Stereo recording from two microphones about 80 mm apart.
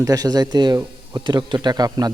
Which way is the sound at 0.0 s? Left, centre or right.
Right.